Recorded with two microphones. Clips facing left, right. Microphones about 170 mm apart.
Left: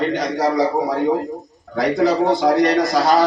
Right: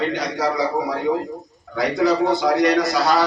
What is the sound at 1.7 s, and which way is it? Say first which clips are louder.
A man's voice: left 2 dB; 45° left (ahead or behind).